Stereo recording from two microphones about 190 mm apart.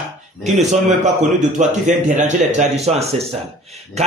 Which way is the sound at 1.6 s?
40° right (ahead or behind).